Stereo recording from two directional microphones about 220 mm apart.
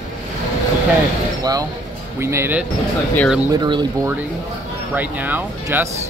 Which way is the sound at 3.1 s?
Centre (ahead or behind).